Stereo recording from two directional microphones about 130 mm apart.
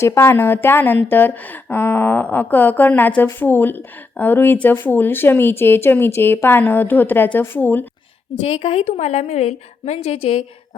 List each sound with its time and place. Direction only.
0.0 s a woman's voice: 20° left (ahead or behind)
8.4 s a woman's voice: 55° left (ahead or behind)